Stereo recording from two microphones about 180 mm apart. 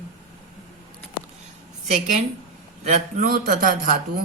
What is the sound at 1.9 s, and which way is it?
Speech, 45° right (ahead or behind).